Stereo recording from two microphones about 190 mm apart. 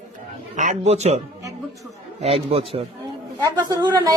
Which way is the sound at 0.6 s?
40° right (ahead or behind).